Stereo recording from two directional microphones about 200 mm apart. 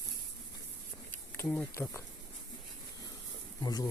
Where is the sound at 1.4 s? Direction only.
10° left (ahead or behind).